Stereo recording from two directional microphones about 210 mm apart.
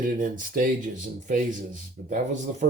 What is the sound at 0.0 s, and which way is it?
Speech, 40° right (ahead or behind).